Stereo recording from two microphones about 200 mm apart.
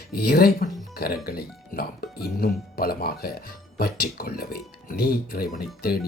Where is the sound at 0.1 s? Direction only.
50° left (ahead or behind).